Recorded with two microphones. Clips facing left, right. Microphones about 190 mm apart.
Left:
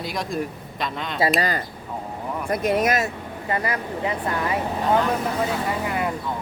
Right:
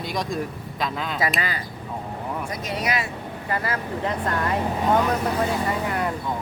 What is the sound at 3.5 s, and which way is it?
Speech, 15° left (ahead or behind).